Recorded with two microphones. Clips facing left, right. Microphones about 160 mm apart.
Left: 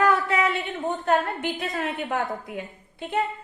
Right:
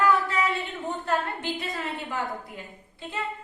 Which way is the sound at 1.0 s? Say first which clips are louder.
Left 5 dB; 60° left (ahead or behind).